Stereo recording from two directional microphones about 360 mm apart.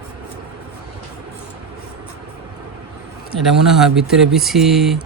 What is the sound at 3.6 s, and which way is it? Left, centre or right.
Speech, centre.